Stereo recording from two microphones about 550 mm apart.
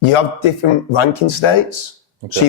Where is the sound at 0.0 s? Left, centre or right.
Left.